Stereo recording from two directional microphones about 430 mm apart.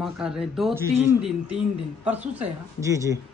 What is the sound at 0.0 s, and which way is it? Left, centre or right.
Speech, centre.